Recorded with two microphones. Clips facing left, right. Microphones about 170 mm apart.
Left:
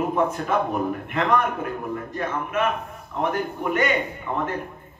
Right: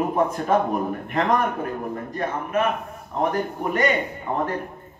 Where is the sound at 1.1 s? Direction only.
35° right (ahead or behind).